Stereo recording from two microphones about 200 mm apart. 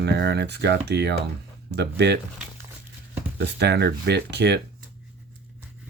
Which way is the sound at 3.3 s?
60° right (ahead or behind).